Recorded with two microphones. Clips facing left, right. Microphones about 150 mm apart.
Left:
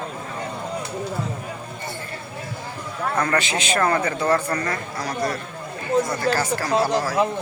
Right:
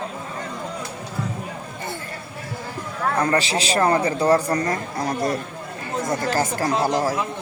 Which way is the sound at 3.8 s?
20° right (ahead or behind).